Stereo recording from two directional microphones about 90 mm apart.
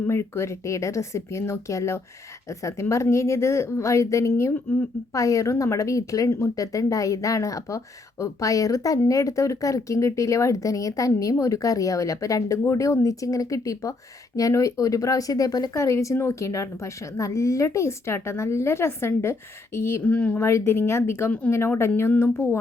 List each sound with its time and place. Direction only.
0.0 s a woman's voice: 30° left (ahead or behind)
5.1 s a woman's voice: 35° left (ahead or behind)
20.1 s speech: 15° left (ahead or behind)
20.4 s speech: 30° left (ahead or behind)